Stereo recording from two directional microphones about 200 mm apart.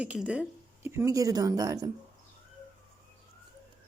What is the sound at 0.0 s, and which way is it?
Speech, 5° right (ahead or behind).